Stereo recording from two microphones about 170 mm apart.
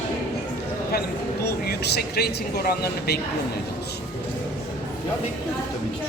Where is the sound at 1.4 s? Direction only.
70° left (ahead or behind).